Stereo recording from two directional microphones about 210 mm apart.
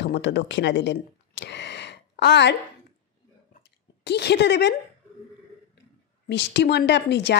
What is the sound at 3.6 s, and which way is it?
Chewing, 50° left (ahead or behind).